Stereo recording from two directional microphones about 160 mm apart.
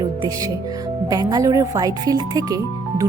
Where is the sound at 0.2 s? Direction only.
20° right (ahead or behind).